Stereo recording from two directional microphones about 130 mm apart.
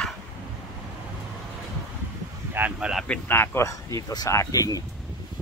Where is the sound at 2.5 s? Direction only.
15° right (ahead or behind).